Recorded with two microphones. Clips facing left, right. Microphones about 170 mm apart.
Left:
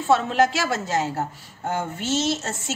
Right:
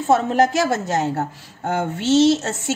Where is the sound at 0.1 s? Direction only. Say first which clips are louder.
Right 3 dB; 45° right (ahead or behind).